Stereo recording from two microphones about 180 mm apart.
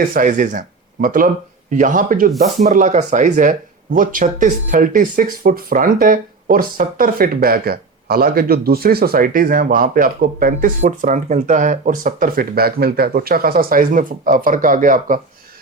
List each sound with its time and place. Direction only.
0.1 s speech: 45° right (ahead or behind)